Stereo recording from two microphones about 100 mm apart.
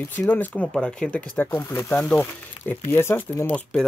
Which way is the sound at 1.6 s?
25° left (ahead or behind).